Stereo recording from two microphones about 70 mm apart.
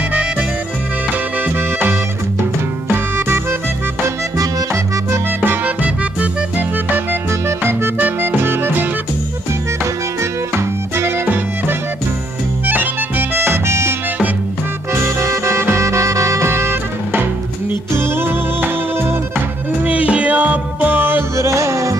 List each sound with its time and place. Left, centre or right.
1.4 s music: right
5.4 s music: right
7.4 s music: right
10.5 s music: right
12.6 s accordion: right
15.0 s music: right
17.9 s music: right
19.8 s music: right
21.4 s music: right